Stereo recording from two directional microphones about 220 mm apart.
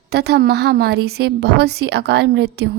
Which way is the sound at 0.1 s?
50° right (ahead or behind).